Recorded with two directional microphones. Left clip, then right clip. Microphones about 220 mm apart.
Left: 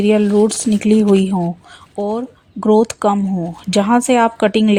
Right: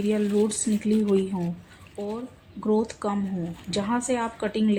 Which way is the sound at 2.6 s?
45° left (ahead or behind).